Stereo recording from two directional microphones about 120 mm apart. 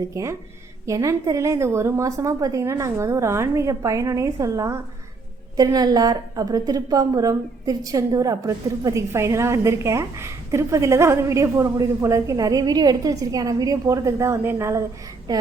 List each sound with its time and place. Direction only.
0.1 s a woman's voice: 25° right (ahead or behind)